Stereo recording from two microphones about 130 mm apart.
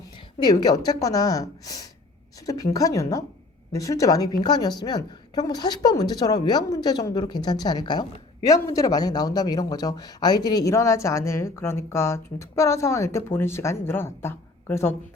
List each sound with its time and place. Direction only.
0.4 s a woman's voice: 30° left (ahead or behind)